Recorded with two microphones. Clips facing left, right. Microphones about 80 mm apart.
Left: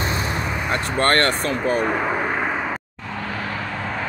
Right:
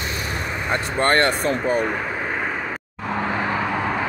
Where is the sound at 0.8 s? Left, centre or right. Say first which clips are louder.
Even; centre.